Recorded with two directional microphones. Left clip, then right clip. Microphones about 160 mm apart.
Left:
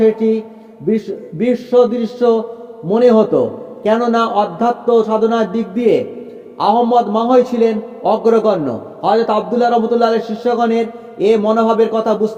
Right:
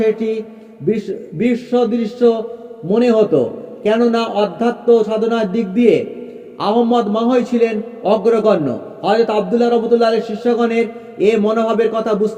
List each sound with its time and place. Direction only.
0.9 s a man's voice: 20° right (ahead or behind)